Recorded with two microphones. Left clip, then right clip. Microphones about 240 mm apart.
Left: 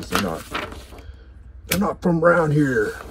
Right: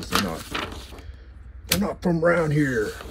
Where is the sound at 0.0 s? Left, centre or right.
Centre.